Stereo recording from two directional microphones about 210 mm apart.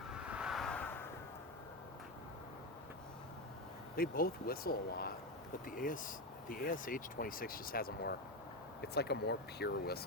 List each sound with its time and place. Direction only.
0.1 s vehicle: 5° right (ahead or behind)
3.9 s speech: 45° left (ahead or behind)